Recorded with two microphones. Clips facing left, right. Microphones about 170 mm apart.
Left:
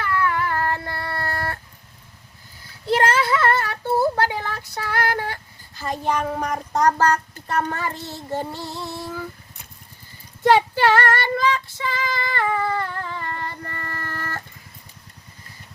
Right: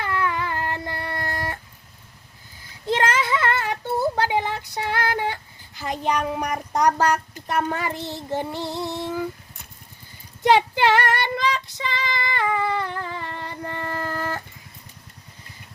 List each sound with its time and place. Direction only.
0.0 s a sound: 20° right (ahead or behind)
2.8 s child singing: 20° right (ahead or behind)
4.2 s female singing: 20° right (ahead or behind)
10.4 s female singing: 20° right (ahead or behind)